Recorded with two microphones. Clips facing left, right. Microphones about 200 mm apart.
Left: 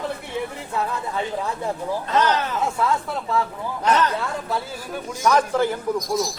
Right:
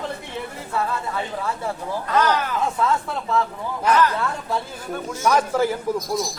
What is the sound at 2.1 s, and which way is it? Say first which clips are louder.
Speech: right 1 dB; 25° left (ahead or behind).